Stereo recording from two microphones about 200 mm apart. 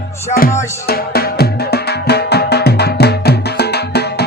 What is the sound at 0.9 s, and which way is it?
Music, 50° left (ahead or behind).